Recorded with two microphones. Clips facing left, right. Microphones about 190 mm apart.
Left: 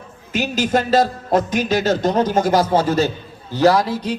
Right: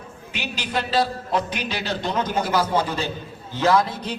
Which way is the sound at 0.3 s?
45° left (ahead or behind).